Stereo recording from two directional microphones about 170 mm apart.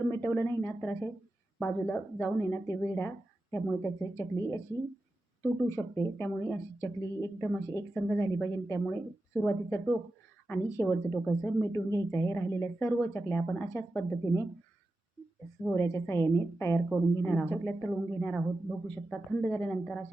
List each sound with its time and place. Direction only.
0.1 s speech: 15° left (ahead or behind)
15.7 s speech: 15° left (ahead or behind)